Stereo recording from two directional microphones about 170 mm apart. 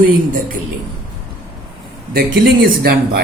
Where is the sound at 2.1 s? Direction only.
70° right (ahead or behind).